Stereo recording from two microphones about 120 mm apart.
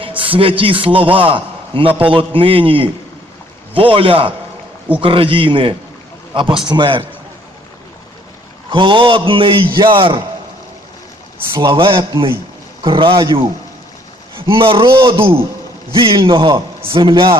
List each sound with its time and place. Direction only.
0.0 s a man's voice: 45° right (ahead or behind)
8.7 s a man's voice: 45° right (ahead or behind)
11.6 s a man's voice: 45° right (ahead or behind)